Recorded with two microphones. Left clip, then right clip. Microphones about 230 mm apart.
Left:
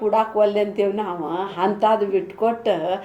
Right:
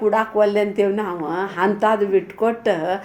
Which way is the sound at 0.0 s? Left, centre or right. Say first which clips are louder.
Right 1 dB; right.